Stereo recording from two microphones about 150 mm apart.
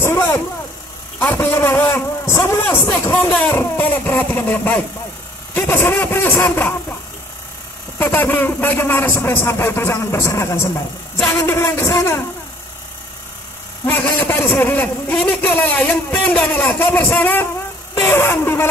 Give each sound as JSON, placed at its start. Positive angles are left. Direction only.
{"t": 0.0, "sound": "vehicle", "side_deg": 15}
{"t": 1.2, "sound": "a man's voice", "side_deg": 15}
{"t": 8.0, "sound": "a man's voice", "side_deg": 15}
{"t": 13.8, "sound": "a man's voice", "side_deg": 15}